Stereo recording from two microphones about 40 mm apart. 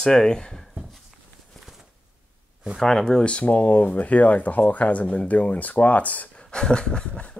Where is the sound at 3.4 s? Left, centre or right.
Left.